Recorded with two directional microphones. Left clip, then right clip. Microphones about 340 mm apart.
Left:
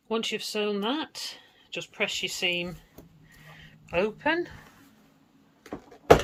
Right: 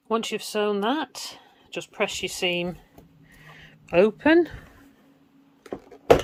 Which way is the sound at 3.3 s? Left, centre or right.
Centre.